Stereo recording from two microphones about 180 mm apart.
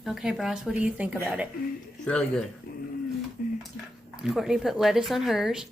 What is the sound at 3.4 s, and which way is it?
Dishes, 50° left (ahead or behind).